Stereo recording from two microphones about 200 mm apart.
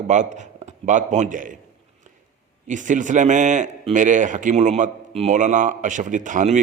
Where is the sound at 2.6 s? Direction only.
40° right (ahead or behind).